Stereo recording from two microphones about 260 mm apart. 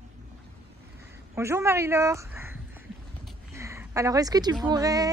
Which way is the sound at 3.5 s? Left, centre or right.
Centre.